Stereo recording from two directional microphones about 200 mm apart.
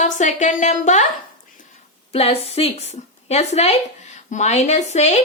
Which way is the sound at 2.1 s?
30° left (ahead or behind).